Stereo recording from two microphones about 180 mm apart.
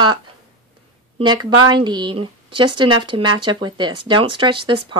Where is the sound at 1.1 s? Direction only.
25° right (ahead or behind).